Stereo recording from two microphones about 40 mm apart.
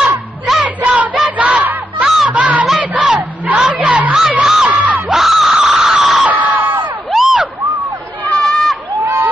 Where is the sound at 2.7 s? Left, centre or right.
Right.